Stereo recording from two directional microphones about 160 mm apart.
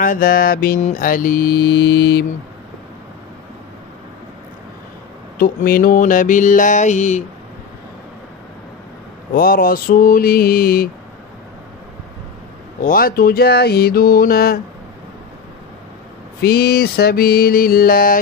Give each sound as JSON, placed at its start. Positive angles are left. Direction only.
{"t": 0.0, "sound": "mantra", "side_deg": 60}
{"t": 5.4, "sound": "mantra", "side_deg": 65}
{"t": 9.3, "sound": "mantra", "side_deg": 65}
{"t": 12.8, "sound": "mantra", "side_deg": 70}
{"t": 16.3, "sound": "mantra", "side_deg": 85}